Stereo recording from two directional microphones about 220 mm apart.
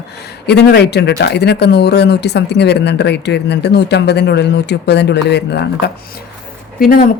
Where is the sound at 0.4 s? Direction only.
50° left (ahead or behind).